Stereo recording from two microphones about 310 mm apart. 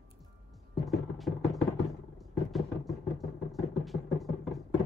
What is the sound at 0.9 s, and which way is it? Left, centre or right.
Music, centre.